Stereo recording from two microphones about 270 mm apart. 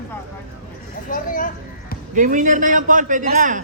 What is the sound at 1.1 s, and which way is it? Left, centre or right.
Speech, left.